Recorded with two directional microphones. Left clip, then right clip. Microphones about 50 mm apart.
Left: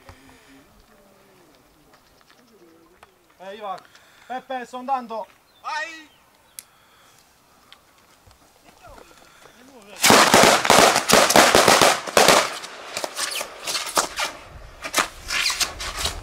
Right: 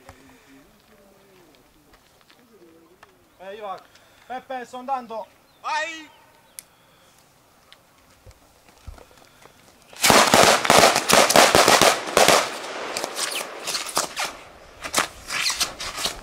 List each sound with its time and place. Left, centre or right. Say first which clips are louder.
3.0 s a sound: left 1 dB; centre
4.3 s speech: left 2 dB; centre
5.6 s a man's voice: right 3 dB; right
8.9 s firecracker: left 2 dB; centre
12.9 s a sound: left 2 dB; centre
15.4 s zipper: right 1 dB; centre